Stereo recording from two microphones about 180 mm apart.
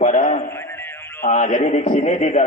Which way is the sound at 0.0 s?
40° left (ahead or behind).